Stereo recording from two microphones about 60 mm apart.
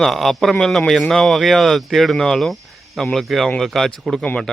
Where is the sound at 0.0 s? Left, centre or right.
Centre.